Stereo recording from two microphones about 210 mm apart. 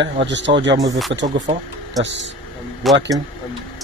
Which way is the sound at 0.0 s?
60° right (ahead or behind).